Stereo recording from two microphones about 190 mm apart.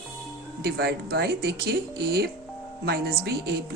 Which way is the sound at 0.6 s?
60° right (ahead or behind).